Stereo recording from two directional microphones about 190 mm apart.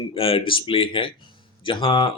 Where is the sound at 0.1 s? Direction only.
30° left (ahead or behind).